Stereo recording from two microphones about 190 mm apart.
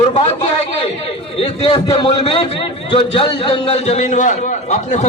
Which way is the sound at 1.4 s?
25° left (ahead or behind).